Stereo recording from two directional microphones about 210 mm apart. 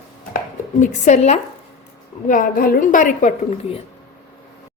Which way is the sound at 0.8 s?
35° left (ahead or behind).